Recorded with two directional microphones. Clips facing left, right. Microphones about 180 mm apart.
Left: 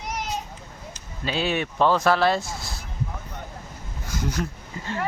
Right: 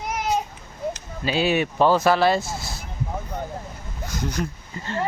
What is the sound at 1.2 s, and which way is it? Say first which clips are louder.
Speech: right 4 dB; 5° right (ahead or behind).